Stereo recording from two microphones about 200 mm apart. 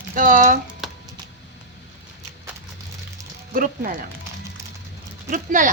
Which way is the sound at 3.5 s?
45° right (ahead or behind).